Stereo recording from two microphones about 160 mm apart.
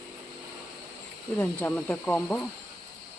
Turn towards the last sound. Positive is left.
turn(degrees=10)  # may be behind; listen again after turning